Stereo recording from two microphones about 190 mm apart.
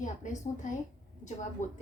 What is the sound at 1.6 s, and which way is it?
Speech, 40° left (ahead or behind).